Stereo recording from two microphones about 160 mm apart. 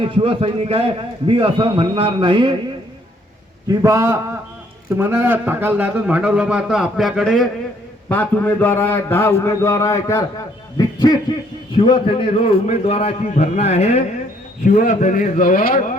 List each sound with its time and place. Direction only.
0.0 s a man's voice: 35° right (ahead or behind)
3.7 s a man's voice: 20° right (ahead or behind); by 10.2 s 15° left (ahead or behind)
10.8 s a sound: 25° left (ahead or behind)
11.8 s a man's voice: 30° left (ahead or behind); by 16.0 s 60° left (ahead or behind)